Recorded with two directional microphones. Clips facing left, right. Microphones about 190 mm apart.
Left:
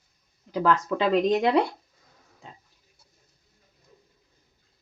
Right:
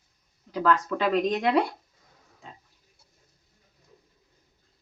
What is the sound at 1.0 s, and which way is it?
Speech, 25° left (ahead or behind).